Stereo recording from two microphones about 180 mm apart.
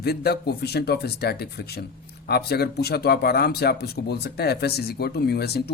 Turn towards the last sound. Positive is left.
turn(degrees=65)  # may be behind; listen again after turning